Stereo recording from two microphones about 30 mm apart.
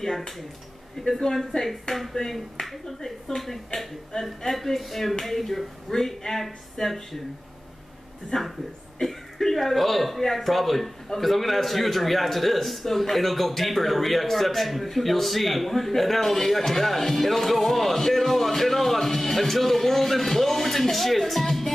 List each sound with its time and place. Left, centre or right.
1.0 s speech: centre
8.3 s speech: centre